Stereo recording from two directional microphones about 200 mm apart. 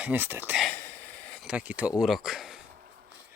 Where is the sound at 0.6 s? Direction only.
5° left (ahead or behind).